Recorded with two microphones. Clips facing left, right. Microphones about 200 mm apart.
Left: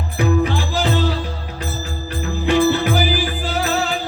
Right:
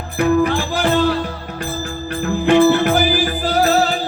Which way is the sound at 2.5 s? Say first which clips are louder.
Right 4 dB; 55° right (ahead or behind).